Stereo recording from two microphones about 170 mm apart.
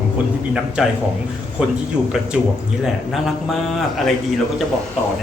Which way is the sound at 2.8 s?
Centre (ahead or behind).